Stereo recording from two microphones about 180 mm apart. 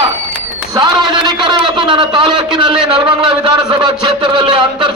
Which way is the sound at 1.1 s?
25° right (ahead or behind).